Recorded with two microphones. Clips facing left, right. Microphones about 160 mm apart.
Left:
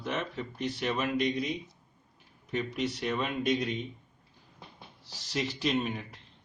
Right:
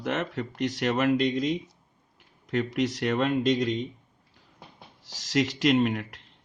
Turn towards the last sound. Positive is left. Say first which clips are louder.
# right 8 dB
turn(degrees=-90)